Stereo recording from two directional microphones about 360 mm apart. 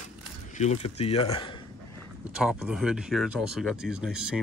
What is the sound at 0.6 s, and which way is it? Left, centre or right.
Speech, centre.